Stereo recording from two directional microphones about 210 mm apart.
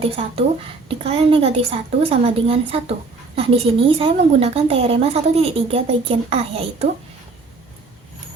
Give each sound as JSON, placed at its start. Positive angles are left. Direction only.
{"t": 0.0, "sound": "a woman's voice", "side_deg": -30}